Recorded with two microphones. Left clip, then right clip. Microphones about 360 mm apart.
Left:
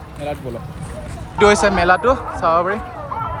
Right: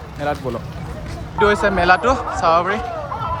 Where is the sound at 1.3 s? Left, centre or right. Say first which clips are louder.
Left 3 dB; centre.